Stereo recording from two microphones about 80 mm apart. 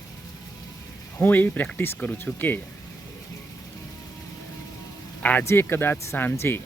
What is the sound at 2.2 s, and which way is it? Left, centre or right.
Speech, left.